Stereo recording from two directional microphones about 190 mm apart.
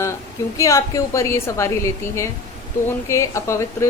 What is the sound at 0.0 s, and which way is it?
A woman's voice, 15° left (ahead or behind).